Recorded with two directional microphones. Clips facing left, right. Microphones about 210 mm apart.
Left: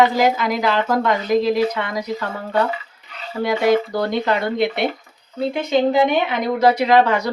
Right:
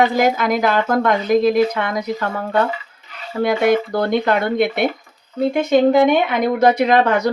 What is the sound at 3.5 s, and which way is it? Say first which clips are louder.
Speech: right 1 dB; 55° right (ahead or behind).